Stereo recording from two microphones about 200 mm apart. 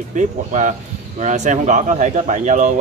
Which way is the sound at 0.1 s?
40° right (ahead or behind).